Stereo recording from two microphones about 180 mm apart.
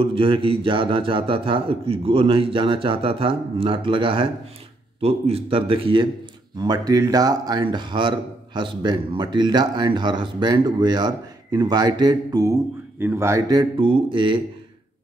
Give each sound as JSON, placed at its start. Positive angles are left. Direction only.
{"t": 0.0, "sound": "a man's voice", "side_deg": -30}